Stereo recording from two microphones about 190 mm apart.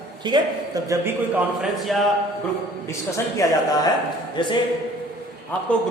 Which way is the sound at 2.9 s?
15° left (ahead or behind).